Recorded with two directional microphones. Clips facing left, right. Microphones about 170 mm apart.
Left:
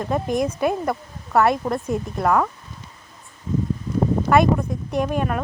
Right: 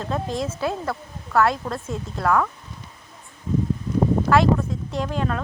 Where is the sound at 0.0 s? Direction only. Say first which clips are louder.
Left 4 dB; 15° left (ahead or behind).